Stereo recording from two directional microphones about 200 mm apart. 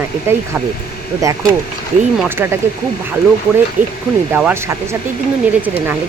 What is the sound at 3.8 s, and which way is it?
Speech, 10° right (ahead or behind).